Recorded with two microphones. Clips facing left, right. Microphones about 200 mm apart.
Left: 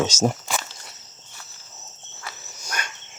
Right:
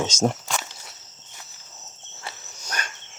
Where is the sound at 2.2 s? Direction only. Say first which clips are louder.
Even; 35° right (ahead or behind).